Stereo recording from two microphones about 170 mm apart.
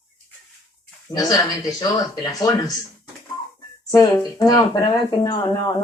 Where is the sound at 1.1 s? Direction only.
25° left (ahead or behind).